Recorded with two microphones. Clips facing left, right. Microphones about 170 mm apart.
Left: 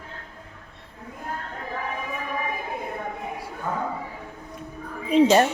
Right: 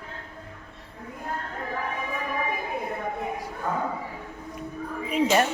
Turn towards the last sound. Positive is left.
turn(degrees=30)  # may be behind; listen again after turning